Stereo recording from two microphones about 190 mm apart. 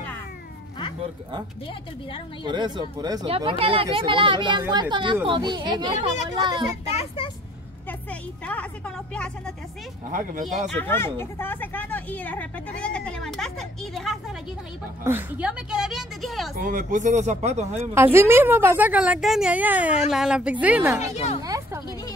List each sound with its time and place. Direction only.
2.4 s speech: 25° right (ahead or behind)
8.1 s a woman's voice: 5° left (ahead or behind)
10.7 s speech: 10° left (ahead or behind)
15.0 s a woman's voice: 10° right (ahead or behind)
16.5 s speech: 45° right (ahead or behind)
17.9 s a woman's voice: 15° right (ahead or behind)
21.0 s speech: 35° left (ahead or behind)
21.4 s a sound: 15° right (ahead or behind)